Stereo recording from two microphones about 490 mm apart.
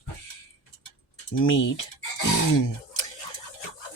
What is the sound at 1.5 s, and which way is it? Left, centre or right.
Music, left.